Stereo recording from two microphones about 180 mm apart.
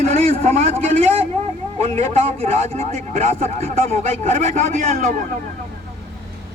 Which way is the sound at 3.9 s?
35° right (ahead or behind).